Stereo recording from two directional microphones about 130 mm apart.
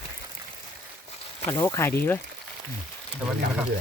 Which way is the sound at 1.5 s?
25° left (ahead or behind).